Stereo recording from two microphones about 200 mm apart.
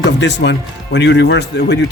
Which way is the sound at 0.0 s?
60° left (ahead or behind).